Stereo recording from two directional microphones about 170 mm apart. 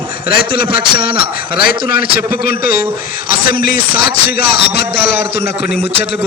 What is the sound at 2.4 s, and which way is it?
Speech, 60° left (ahead or behind).